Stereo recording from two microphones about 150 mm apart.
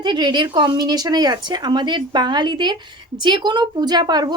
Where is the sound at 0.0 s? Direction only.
30° right (ahead or behind).